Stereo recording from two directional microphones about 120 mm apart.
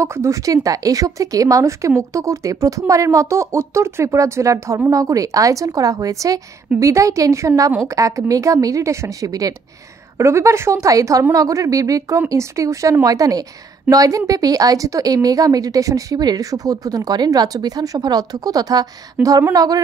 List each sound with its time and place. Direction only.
0.0 s a woman's voice: 25° right (ahead or behind)
19.2 s speech: 15° right (ahead or behind)
19.5 s a woman's voice: 30° right (ahead or behind)